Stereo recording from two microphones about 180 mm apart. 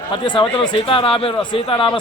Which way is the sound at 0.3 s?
30° left (ahead or behind).